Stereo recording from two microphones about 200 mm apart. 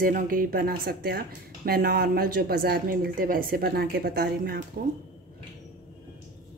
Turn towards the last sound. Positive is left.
turn(degrees=-50)  # may be behind; listen again after turning